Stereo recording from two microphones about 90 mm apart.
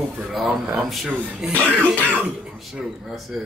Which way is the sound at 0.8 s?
5° right (ahead or behind).